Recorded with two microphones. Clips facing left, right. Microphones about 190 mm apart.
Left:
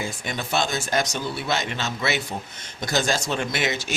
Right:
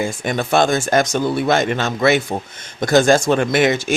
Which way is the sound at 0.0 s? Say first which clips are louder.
Right 9 dB; 55° right (ahead or behind).